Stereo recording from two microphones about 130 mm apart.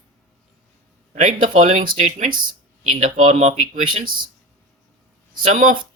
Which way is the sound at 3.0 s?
80° right.